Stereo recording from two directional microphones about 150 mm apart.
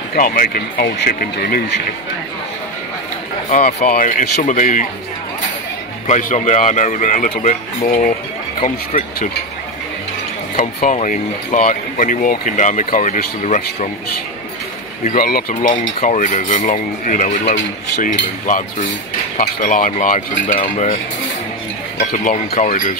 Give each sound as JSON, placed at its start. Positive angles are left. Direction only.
{"t": 0.1, "sound": "speech", "side_deg": 75}
{"t": 3.4, "sound": "speech", "side_deg": 60}
{"t": 6.0, "sound": "speech", "side_deg": 50}
{"t": 10.5, "sound": "speech", "side_deg": 60}
{"t": 15.0, "sound": "speech", "side_deg": 75}
{"t": 16.0, "sound": "speech", "side_deg": 55}
{"t": 19.3, "sound": "speech", "side_deg": 50}
{"t": 19.7, "sound": "speech", "side_deg": 65}
{"t": 20.5, "sound": "cutlery", "side_deg": 40}
{"t": 21.9, "sound": "speech", "side_deg": 60}